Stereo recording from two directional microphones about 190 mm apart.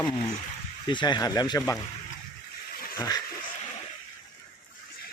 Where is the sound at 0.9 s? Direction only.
25° left (ahead or behind).